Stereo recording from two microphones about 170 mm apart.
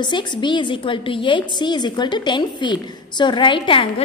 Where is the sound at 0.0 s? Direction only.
25° left (ahead or behind).